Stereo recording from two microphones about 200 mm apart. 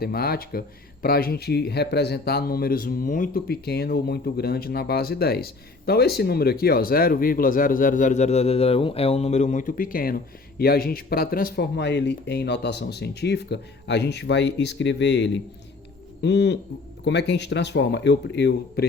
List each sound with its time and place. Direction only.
0.0 s speech: 50° left (ahead or behind)